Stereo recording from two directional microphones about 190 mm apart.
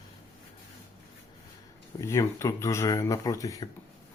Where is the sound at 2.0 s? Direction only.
15° left (ahead or behind).